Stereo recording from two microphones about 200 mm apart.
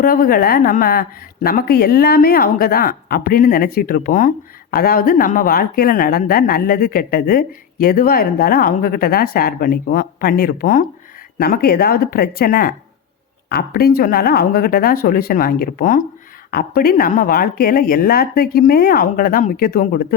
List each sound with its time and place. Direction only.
0.0 s speech: 45° left (ahead or behind)